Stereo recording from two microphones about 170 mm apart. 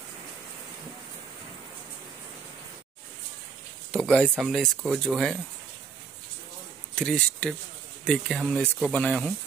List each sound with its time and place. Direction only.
3.9 s speech: 5° left (ahead or behind)
7.0 s speech: 5° left (ahead or behind)